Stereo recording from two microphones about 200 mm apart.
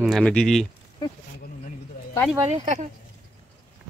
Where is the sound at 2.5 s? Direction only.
35° right (ahead or behind).